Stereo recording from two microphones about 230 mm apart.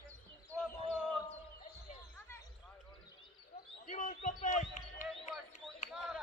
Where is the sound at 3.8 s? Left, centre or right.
Left.